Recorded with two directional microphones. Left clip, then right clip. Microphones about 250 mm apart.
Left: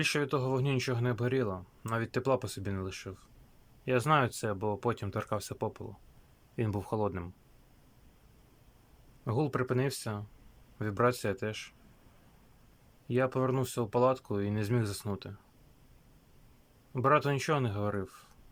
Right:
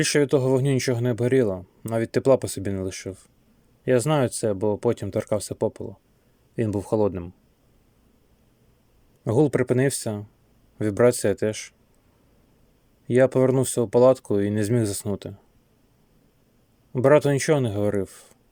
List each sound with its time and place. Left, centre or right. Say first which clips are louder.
0.0 s speech: right 10 dB; right
9.2 s speech: right 12 dB; right
13.1 s speech: right 12 dB; right
16.9 s speech: right 10 dB; right